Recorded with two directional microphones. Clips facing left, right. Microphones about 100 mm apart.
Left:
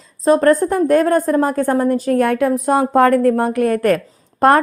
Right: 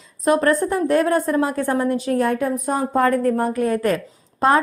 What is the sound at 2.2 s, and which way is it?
A woman's voice, 75° left (ahead or behind).